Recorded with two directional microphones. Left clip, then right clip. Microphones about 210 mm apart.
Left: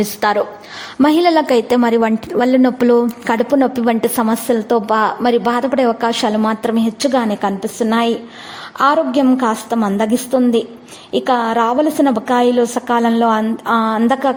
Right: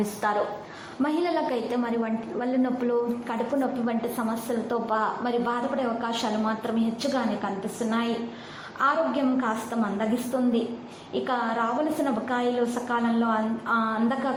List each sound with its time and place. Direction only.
1.0 s a woman's voice: 45° left (ahead or behind)